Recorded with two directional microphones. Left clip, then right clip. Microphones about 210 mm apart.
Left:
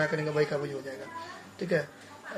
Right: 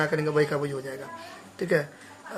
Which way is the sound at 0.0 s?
35° right (ahead or behind).